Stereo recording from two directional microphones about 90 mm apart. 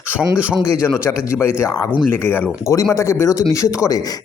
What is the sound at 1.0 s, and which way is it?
A man's voice, 30° left (ahead or behind).